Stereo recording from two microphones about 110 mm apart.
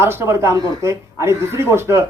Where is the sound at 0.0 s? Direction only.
25° right (ahead or behind).